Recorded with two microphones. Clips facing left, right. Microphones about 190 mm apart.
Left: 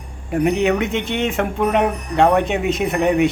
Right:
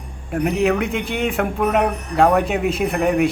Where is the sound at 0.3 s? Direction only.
Centre (ahead or behind).